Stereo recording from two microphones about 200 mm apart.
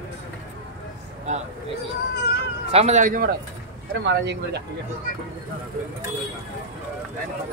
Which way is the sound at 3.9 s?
60° right (ahead or behind).